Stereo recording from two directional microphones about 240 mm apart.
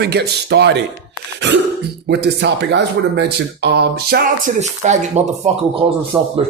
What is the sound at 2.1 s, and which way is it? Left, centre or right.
Speech, right.